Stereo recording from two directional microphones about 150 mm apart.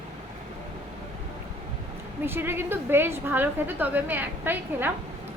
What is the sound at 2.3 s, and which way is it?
A woman's voice, 15° right (ahead or behind).